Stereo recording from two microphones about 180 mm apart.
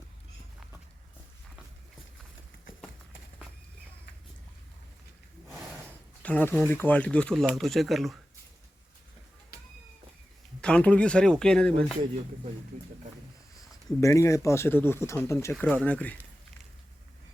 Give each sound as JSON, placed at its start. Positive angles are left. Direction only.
{"t": 6.2, "sound": "speech", "side_deg": 10}
{"t": 10.6, "sound": "speech", "side_deg": 5}
{"t": 14.0, "sound": "speech", "side_deg": 15}